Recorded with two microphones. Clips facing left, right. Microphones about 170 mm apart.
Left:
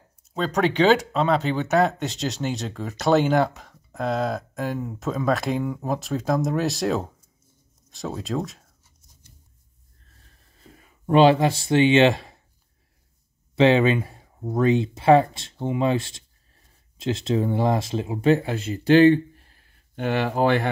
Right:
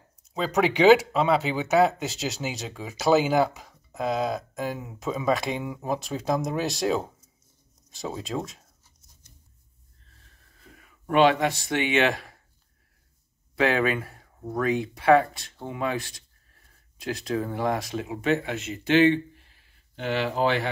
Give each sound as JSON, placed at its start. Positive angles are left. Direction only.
{"t": 0.3, "sound": "speech", "side_deg": -5}
{"t": 10.8, "sound": "speech", "side_deg": 30}
{"t": 13.6, "sound": "speech", "side_deg": 25}